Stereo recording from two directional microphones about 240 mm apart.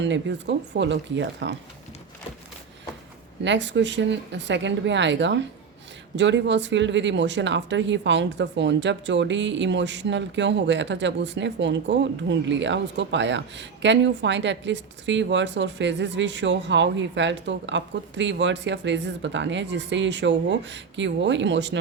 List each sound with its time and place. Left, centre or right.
0.0 s speech: right
3.4 s speech: right